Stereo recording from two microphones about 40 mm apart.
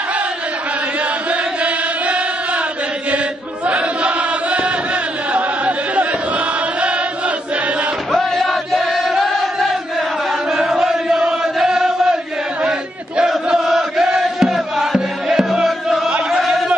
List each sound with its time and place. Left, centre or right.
1.3 s chant: right
3.6 s chant: right
8.1 s chant: centre
10.5 s chant: centre
13.6 s music: centre
16.3 s a sound: centre